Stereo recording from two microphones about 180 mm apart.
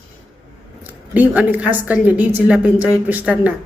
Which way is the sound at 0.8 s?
10° right (ahead or behind).